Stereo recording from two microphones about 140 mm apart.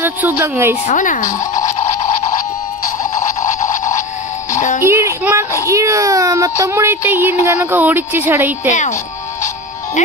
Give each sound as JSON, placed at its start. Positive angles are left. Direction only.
{"t": 0.0, "sound": "speech", "side_deg": -15}
{"t": 0.8, "sound": "speech", "side_deg": 65}
{"t": 1.4, "sound": "music", "side_deg": 25}
{"t": 3.4, "sound": "a sound", "side_deg": 65}
{"t": 4.5, "sound": "music", "side_deg": 65}
{"t": 4.8, "sound": "child singing", "side_deg": -20}
{"t": 5.7, "sound": "a child's voice", "side_deg": -20}
{"t": 10.0, "sound": "speech", "side_deg": 60}